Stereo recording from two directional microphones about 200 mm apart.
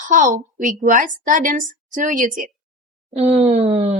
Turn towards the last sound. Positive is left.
turn(degrees=-30)  # may be behind; listen again after turning